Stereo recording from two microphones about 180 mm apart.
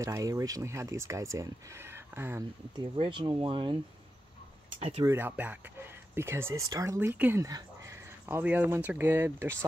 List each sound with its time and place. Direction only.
0.0 s speech: 20° right (ahead or behind)
2.7 s speech: 25° right (ahead or behind)
4.7 s speech: 30° right (ahead or behind)
5.0 s speech: 10° right (ahead or behind)